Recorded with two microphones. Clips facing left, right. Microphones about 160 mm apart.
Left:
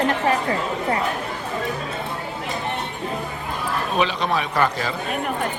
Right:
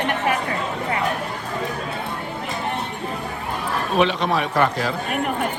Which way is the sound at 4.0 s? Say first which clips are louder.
Right 3 dB; centre (ahead or behind).